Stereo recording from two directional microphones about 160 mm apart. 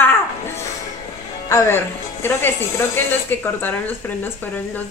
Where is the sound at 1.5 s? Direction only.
20° left (ahead or behind).